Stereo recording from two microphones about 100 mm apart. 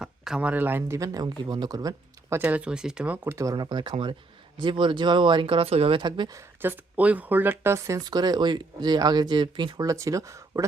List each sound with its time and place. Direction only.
0.0 s speech: 10° right (ahead or behind)
0.9 s speech: 35° right (ahead or behind)
2.3 s speech: 15° right (ahead or behind)
3.3 s speech: 40° right (ahead or behind)
6.6 s speech: 20° right (ahead or behind)
8.0 s speech: 45° right (ahead or behind)
9.8 s speech: 30° right (ahead or behind)